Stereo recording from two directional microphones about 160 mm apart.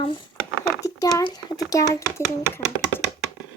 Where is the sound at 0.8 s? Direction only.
20° left (ahead or behind).